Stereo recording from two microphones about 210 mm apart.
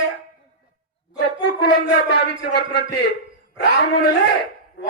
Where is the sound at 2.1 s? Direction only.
50° left (ahead or behind).